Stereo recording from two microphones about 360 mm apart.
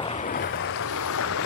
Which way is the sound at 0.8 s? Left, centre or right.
Left.